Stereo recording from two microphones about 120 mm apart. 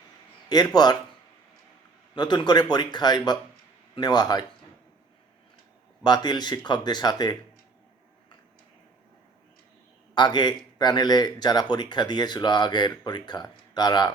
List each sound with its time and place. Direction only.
0.4 s speech: 35° left (ahead or behind)
2.1 s speech: 35° left (ahead or behind)
6.0 s speech: 35° left (ahead or behind)
10.2 s speech: 35° left (ahead or behind)